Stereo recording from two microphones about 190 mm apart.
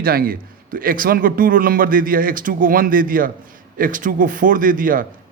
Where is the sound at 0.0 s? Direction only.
50° right (ahead or behind).